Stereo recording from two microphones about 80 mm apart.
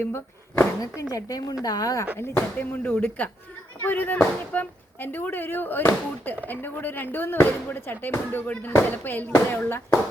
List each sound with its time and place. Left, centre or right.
0.0 s speech: left
1.1 s a woman's voice: left
2.1 s speech: left